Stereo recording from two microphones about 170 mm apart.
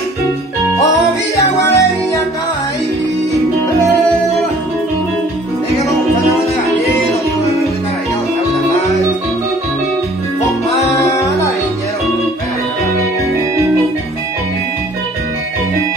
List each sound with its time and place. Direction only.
1.3 s music: 15° left (ahead or behind)
11.0 s music: 15° left (ahead or behind)